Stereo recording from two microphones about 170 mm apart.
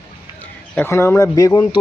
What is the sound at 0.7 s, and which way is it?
Speech, 15° left (ahead or behind).